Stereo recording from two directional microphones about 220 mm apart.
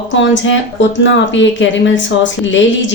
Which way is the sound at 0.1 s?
55° left (ahead or behind).